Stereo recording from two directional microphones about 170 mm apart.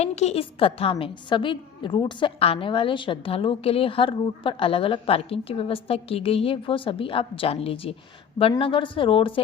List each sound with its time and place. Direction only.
0.0 s a woman's voice: 40° left (ahead or behind)